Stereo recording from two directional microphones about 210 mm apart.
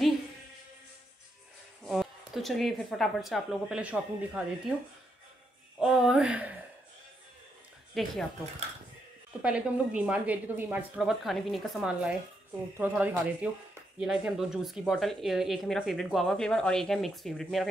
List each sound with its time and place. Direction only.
1.9 s a woman's voice: centre (ahead or behind)
5.8 s speech: centre (ahead or behind)
7.9 s speech: centre (ahead or behind)
9.4 s a woman's voice: 5° right (ahead or behind)